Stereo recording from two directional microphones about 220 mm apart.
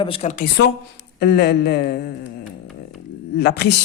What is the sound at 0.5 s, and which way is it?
A man's voice, 50° left (ahead or behind).